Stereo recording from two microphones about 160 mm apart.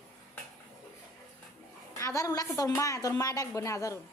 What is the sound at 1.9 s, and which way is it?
A woman's voice, 20° left (ahead or behind).